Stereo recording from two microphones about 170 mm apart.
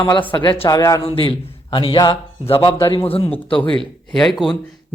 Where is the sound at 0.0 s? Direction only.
25° left (ahead or behind).